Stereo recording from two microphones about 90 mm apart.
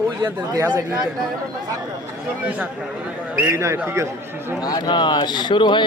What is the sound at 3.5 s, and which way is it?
Speech, 30° right (ahead or behind).